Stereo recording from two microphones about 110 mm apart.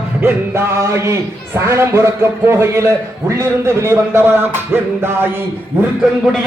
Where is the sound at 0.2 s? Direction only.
20° right (ahead or behind).